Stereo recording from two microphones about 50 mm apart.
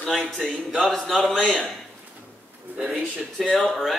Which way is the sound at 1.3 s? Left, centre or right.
Centre.